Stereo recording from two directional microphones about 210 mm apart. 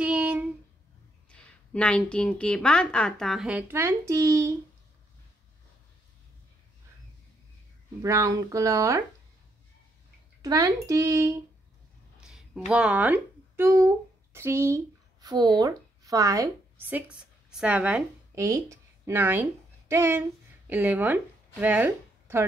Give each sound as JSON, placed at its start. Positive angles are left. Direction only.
{"t": 0.0, "sound": "a sound", "side_deg": -5}
{"t": 1.3, "sound": "a woman's voice", "side_deg": 5}
{"t": 8.0, "sound": "speech", "side_deg": -15}
{"t": 10.4, "sound": "speech", "side_deg": -15}
{"t": 12.2, "sound": "speech", "side_deg": -5}